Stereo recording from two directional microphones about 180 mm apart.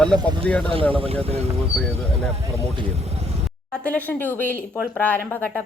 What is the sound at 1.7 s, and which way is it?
Speech, 5° left (ahead or behind).